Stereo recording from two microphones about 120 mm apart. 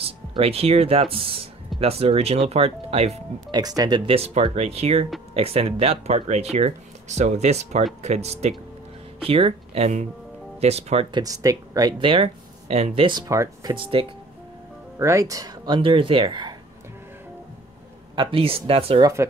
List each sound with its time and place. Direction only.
0.0 s speech: 55° right (ahead or behind)
3.5 s speech: 35° right (ahead or behind)
4.0 s speech: 55° right (ahead or behind)
9.2 s speech: 50° right (ahead or behind)
11.1 s speech: 35° right (ahead or behind)
12.0 s speech: 50° right (ahead or behind)
13.3 s speech: 30° right (ahead or behind)
13.7 s speech: 45° right (ahead or behind)
15.0 s speech: 25° right (ahead or behind); by 16.5 s 40° right (ahead or behind)
18.1 s speech: 45° right (ahead or behind)
19.2 s speech: 20° right (ahead or behind)